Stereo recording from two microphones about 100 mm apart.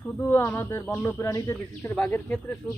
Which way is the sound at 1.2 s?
35° left (ahead or behind).